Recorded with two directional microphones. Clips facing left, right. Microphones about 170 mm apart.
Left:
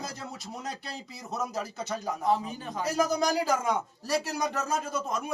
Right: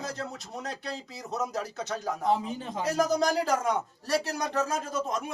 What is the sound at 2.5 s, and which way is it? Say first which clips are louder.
Speech: right 2 dB; 25° right (ahead or behind).